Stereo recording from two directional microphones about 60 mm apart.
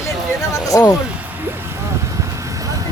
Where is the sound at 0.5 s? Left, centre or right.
Left.